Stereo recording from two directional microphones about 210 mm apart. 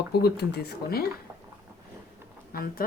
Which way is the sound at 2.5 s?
45° left (ahead or behind).